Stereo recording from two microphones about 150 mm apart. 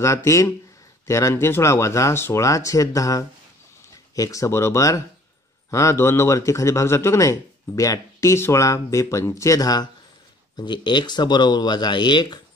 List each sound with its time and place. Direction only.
0.0 s speech: 20° left (ahead or behind)